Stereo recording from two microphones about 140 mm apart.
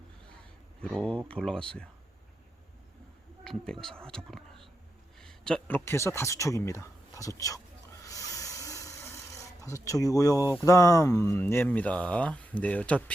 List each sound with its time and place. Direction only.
0.8 s speech: 5° left (ahead or behind)
3.4 s speech: 5° left (ahead or behind); by 7.6 s 25° left (ahead or behind)
8.0 s a sound: 25° left (ahead or behind)
10.6 s speech: 25° left (ahead or behind)